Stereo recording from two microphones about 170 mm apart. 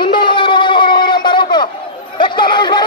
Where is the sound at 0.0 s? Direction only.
30° left (ahead or behind).